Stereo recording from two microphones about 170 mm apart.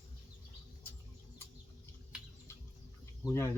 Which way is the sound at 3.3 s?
15° left (ahead or behind).